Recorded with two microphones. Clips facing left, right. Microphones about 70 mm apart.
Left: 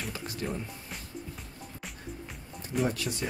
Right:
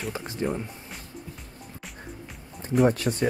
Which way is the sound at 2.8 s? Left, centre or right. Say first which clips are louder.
Right 9 dB; right.